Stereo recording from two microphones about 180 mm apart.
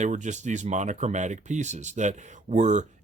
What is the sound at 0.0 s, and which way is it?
Speech, 45° right (ahead or behind).